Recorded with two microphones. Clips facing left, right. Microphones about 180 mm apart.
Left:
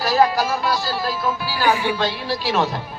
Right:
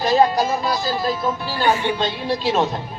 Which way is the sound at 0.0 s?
25° right (ahead or behind).